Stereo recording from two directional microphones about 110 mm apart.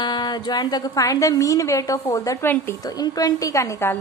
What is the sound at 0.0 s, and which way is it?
A woman's voice, 40° left (ahead or behind).